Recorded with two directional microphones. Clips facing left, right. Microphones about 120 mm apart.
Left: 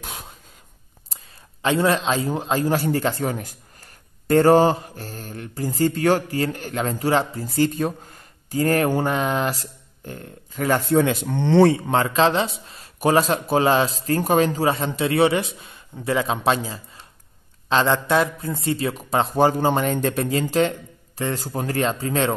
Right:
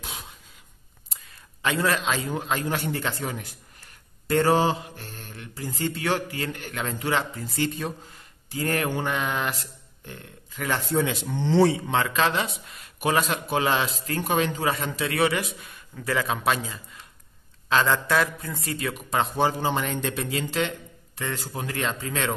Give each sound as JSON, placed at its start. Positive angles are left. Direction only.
{"t": 0.0, "sound": "a sound", "side_deg": 50}
{"t": 1.0, "sound": "a man's voice", "side_deg": 30}
{"t": 10.9, "sound": "speech", "side_deg": 55}
{"t": 11.9, "sound": "speech", "side_deg": 35}